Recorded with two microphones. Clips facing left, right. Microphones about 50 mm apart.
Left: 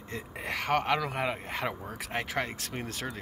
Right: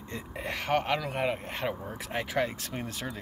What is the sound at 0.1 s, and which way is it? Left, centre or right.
Speech, left.